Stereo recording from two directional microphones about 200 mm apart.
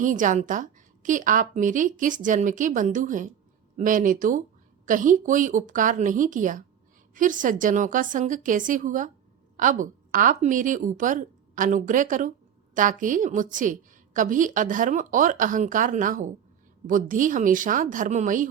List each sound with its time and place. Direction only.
0.0 s a woman's voice: 40° right (ahead or behind)